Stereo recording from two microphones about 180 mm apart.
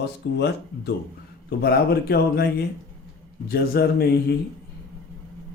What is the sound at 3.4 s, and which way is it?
Speech, 60° left (ahead or behind).